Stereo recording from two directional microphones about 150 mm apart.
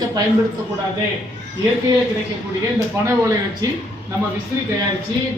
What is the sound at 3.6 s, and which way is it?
Speech, 25° right (ahead or behind).